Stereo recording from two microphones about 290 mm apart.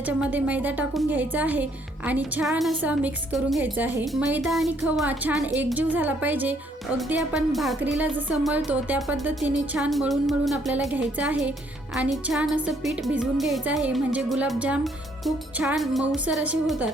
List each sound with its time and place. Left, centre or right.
0.0 s music: centre